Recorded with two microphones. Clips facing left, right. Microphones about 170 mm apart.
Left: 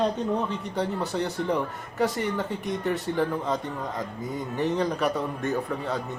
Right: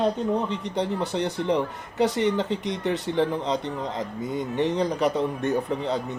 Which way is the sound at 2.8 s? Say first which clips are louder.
Right 2 dB; 20° right (ahead or behind).